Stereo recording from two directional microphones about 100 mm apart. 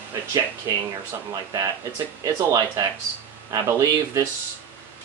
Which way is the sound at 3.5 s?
40° right (ahead or behind).